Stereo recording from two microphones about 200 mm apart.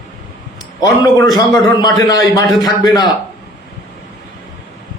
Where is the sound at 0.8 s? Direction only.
20° left (ahead or behind).